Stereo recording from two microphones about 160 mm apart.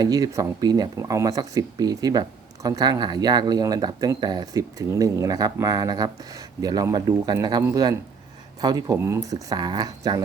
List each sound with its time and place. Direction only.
0.0 s speech: 20° right (ahead or behind)